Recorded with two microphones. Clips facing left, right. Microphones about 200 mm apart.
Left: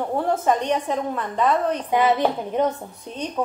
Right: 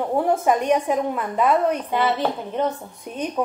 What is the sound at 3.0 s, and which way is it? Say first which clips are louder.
Speech: right 3 dB; 15° right (ahead or behind).